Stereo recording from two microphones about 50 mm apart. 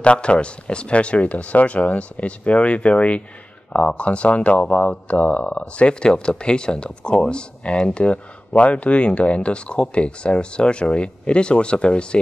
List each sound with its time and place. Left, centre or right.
0.0 s speech: left